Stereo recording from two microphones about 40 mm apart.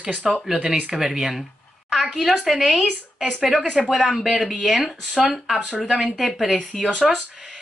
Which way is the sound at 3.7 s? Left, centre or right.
Centre.